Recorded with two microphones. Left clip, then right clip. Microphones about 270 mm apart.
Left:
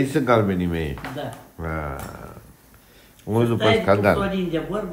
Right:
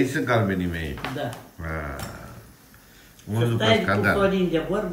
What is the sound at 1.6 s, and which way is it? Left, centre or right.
Speech, centre.